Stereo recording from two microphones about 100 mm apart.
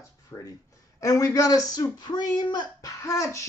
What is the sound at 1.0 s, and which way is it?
Speech, 35° left (ahead or behind).